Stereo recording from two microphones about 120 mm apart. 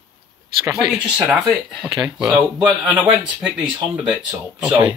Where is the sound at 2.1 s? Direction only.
5° right (ahead or behind).